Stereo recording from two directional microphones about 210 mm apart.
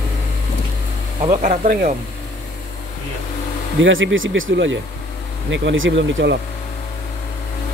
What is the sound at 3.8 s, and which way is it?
Speech, 65° right (ahead or behind).